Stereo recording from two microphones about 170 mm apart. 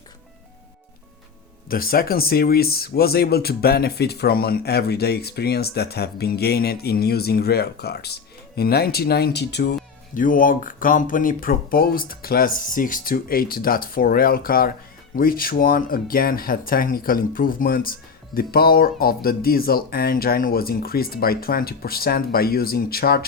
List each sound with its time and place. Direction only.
1.7 s speech: 60° left (ahead or behind); by 9.7 s 80° left
10.2 s speech: 55° left (ahead or behind)